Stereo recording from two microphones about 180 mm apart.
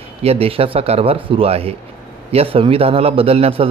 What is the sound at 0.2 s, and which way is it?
Speech, 35° right (ahead or behind).